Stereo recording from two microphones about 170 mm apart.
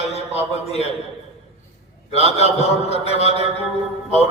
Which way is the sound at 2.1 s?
40° left (ahead or behind).